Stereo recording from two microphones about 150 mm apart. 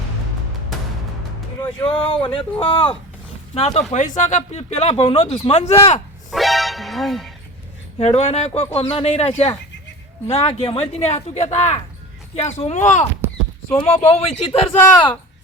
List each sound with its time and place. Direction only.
1.6 s speech: 35° left (ahead or behind)
3.9 s speech: 55° left (ahead or behind)
6.3 s music: centre (ahead or behind)
7.9 s speech: 45° left (ahead or behind)
13.7 s speech: 15° left (ahead or behind)
14.1 s speech: 40° left (ahead or behind)
14.7 s speech: 15° left (ahead or behind)